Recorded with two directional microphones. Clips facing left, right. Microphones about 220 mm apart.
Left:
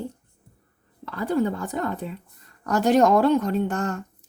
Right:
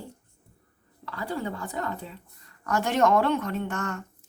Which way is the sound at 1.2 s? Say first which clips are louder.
Left 8 dB; 45° left (ahead or behind).